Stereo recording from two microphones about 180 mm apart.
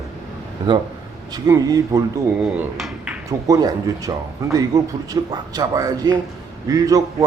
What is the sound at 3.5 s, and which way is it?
Speech, 20° right (ahead or behind).